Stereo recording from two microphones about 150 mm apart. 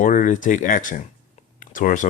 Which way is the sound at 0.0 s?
65° left (ahead or behind).